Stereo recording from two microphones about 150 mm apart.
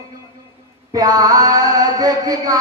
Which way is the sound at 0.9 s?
25° right (ahead or behind).